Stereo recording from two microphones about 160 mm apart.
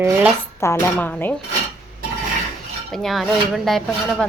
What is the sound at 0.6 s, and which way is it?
Speech, 15° left (ahead or behind).